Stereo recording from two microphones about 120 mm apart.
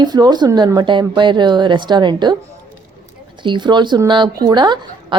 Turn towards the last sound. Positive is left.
turn(degrees=-40)  # may be behind; listen again after turning